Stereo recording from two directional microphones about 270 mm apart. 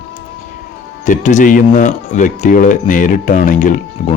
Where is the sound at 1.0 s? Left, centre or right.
Left.